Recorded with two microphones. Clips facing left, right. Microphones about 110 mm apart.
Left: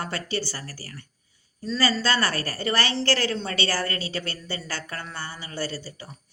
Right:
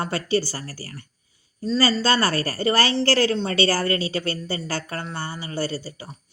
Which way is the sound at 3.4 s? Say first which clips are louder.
Right 6 dB; 35° right (ahead or behind).